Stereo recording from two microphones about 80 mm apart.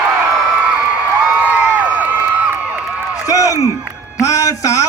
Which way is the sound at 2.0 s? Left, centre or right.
Right.